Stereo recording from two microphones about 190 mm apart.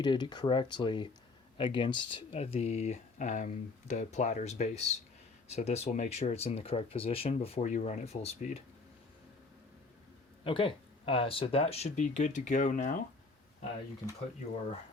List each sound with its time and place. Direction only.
0.0 s speech: 25° left (ahead or behind)
10.4 s speech: 25° left (ahead or behind); by 13.0 s 45° left (ahead or behind)